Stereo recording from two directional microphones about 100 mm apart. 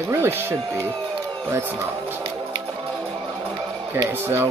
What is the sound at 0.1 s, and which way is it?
Speech, 25° right (ahead or behind).